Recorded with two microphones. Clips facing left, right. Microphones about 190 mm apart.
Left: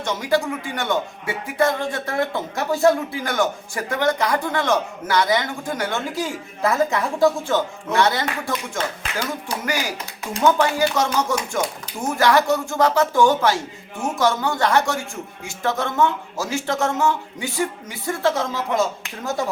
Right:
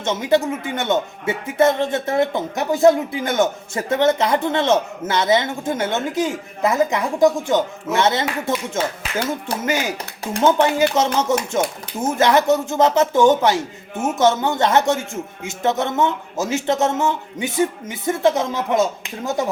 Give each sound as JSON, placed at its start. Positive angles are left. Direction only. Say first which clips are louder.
{"t": 0.0, "sound": "a man's voice", "louder": "right 3 dB", "side_deg": -20}